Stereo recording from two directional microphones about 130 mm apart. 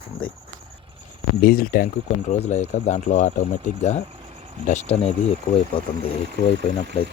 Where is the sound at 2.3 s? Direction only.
60° left (ahead or behind).